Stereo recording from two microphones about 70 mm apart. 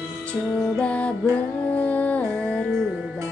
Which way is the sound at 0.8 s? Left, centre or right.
Centre.